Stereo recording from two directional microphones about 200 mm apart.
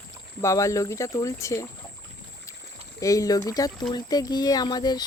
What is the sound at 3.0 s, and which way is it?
Speech, 15° left (ahead or behind).